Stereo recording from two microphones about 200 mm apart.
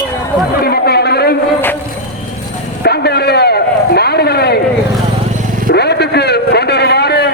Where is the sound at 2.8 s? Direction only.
55° left (ahead or behind).